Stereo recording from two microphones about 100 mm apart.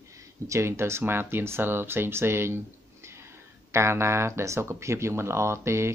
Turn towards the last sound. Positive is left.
turn(degrees=-25)  # may be behind; listen again after turning